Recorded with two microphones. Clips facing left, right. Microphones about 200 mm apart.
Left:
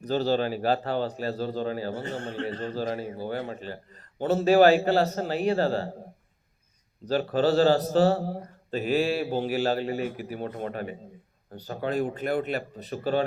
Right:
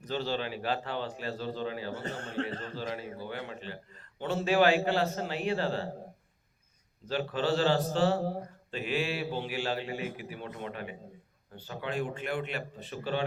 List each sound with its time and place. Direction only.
0.0 s a man's voice: 40° left (ahead or behind)
7.0 s a man's voice: 40° left (ahead or behind)